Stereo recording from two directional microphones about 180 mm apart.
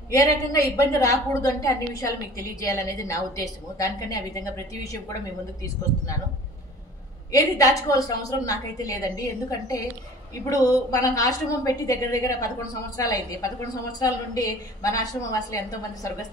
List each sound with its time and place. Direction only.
0.1 s a woman's voice: 20° left (ahead or behind)
7.3 s a woman's voice: 20° left (ahead or behind)
10.6 s a woman's voice: 20° left (ahead or behind)